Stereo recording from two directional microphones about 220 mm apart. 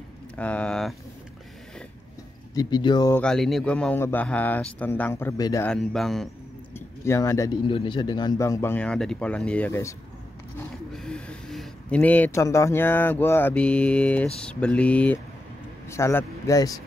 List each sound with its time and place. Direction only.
0.4 s mantra: 5° left (ahead or behind)
2.5 s speech: 20° left (ahead or behind)
3.2 s speech: centre (ahead or behind)
5.7 s mantra: centre (ahead or behind)
6.7 s speech: 10° left (ahead or behind)
14.4 s mantra: 5° left (ahead or behind)
15.9 s speech: 10° left (ahead or behind)